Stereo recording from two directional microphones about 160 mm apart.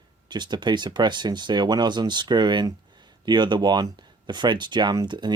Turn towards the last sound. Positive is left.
turn(degrees=-25)  # may be behind; listen again after turning